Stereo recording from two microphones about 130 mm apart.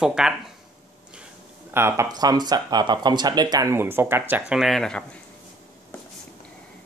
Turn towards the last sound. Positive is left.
turn(degrees=5)  # may be behind; listen again after turning